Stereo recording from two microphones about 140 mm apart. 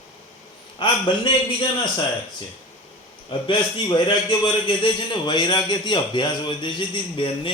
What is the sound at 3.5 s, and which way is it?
A man's voice, 35° left (ahead or behind).